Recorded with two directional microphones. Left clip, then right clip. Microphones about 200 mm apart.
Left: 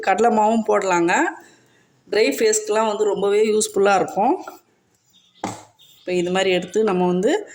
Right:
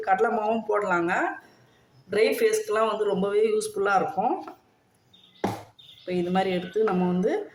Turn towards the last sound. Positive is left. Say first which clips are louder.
# left 7 dB
turn(degrees=40)  # may be behind; listen again after turning